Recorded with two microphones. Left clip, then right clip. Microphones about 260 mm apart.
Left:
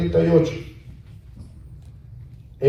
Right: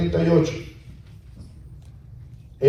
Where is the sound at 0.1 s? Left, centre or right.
Right.